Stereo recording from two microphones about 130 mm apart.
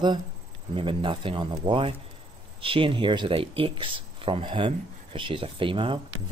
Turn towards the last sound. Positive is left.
turn(degrees=-40)  # may be behind; listen again after turning